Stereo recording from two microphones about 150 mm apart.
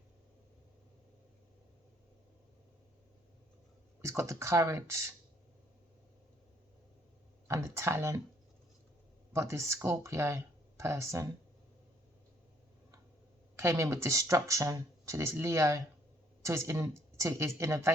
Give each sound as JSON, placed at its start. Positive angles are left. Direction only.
{"t": 4.0, "sound": "speech", "side_deg": -20}
{"t": 7.4, "sound": "speech", "side_deg": -20}
{"t": 9.3, "sound": "speech", "side_deg": -20}
{"t": 13.6, "sound": "speech", "side_deg": -20}